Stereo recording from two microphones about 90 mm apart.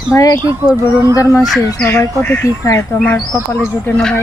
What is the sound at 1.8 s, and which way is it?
Speech, 30° left (ahead or behind).